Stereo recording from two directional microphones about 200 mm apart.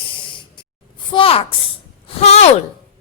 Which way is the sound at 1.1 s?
25° left (ahead or behind).